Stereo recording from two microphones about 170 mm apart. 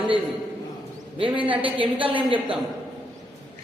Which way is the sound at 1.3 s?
30° right (ahead or behind).